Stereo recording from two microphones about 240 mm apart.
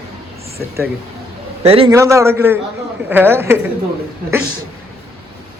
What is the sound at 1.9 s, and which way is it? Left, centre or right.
A man's voice, centre.